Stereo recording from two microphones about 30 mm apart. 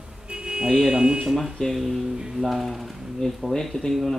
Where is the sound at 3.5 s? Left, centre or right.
Centre.